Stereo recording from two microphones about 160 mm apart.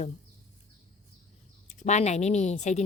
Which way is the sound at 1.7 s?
45° left (ahead or behind).